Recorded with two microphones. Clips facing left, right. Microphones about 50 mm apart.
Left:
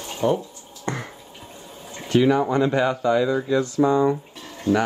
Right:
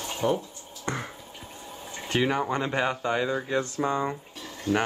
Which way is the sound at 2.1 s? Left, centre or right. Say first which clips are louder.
Left 8 dB; right.